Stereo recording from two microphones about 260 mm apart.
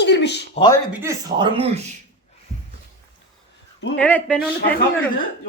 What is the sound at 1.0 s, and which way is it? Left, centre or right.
Speech, centre.